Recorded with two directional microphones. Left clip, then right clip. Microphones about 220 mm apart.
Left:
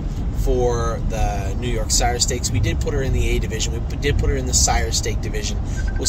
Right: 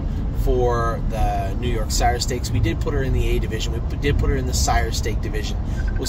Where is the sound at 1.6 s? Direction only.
10° left (ahead or behind).